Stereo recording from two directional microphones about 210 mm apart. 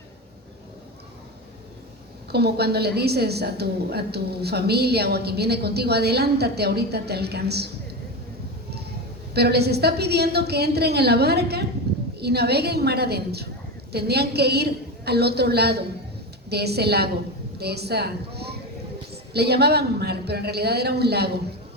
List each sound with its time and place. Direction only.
2.3 s a woman's voice: 50° right (ahead or behind)
9.3 s a woman's voice: 50° right (ahead or behind)
11.9 s a sound: 50° right (ahead or behind)
12.2 s a woman's voice: 50° right (ahead or behind)